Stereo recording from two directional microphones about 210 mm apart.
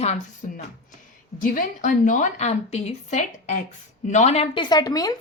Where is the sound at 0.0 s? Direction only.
35° left (ahead or behind).